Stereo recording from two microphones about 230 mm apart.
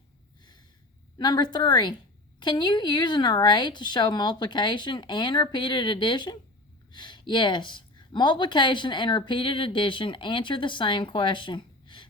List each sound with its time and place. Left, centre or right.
1.2 s speech: centre